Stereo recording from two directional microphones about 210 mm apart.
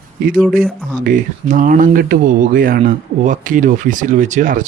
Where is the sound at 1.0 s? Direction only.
40° right (ahead or behind).